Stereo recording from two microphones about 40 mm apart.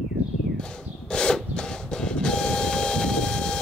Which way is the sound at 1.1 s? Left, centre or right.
Centre.